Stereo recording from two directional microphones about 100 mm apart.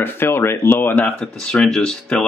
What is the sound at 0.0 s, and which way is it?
Speech, 25° left (ahead or behind).